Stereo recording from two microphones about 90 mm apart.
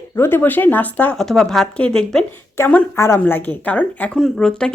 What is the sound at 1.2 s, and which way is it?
Speech, 5° left (ahead or behind).